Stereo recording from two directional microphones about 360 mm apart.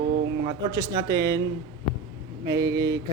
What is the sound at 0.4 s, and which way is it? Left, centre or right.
Speech, centre.